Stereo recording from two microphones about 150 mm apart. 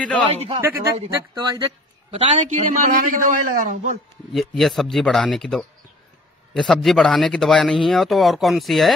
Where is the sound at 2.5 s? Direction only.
55° right (ahead or behind).